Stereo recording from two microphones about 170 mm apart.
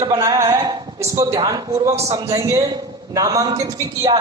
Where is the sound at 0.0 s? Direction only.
20° right (ahead or behind).